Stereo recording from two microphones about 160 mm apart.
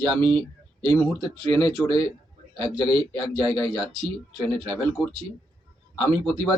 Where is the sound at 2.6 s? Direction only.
25° left (ahead or behind).